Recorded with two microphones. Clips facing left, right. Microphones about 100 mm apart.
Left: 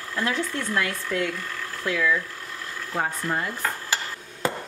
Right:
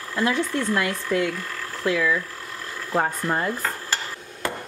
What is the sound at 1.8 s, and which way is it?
Speech, 15° right (ahead or behind).